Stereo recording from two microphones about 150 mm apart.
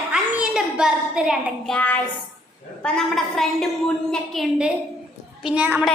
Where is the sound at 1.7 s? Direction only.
10° left (ahead or behind).